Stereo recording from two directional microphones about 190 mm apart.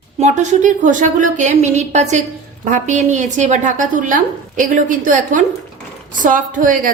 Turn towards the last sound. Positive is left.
turn(degrees=-45)  # may be behind; listen again after turning